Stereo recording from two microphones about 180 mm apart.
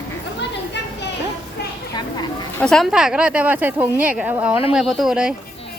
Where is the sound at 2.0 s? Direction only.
25° left (ahead or behind).